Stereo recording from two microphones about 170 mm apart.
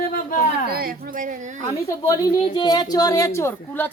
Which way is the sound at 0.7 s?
60° right (ahead or behind).